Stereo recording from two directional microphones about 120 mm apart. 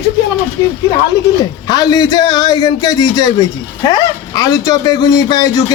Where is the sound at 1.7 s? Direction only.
30° left (ahead or behind).